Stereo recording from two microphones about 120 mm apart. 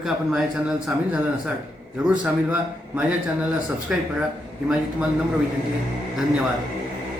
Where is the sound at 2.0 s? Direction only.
10° right (ahead or behind).